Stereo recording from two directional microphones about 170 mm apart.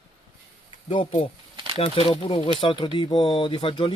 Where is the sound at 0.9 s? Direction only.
30° left (ahead or behind).